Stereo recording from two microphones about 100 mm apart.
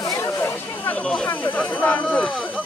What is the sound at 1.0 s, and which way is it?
Speech, 10° left (ahead or behind).